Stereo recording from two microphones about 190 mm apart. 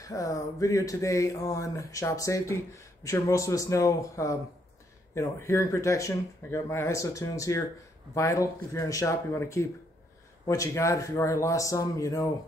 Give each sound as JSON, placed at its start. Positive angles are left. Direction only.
{"t": 0.0, "sound": "speech", "side_deg": 15}